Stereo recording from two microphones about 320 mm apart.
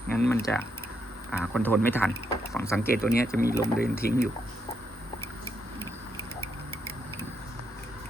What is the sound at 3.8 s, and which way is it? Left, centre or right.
Speech, left.